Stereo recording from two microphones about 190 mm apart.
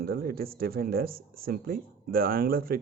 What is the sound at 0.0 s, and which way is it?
Speech, 50° right (ahead or behind).